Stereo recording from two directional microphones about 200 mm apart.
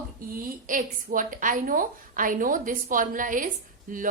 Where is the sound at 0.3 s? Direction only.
40° right (ahead or behind).